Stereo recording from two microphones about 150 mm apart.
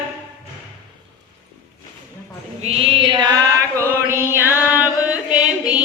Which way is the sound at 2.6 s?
40° right (ahead or behind).